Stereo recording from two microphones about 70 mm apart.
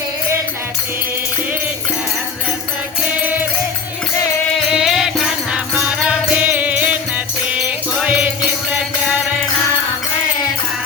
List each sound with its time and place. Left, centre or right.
3.2 s music: right
4.8 s music: centre